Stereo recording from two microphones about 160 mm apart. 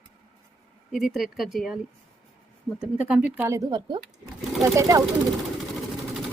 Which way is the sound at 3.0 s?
10° right (ahead or behind).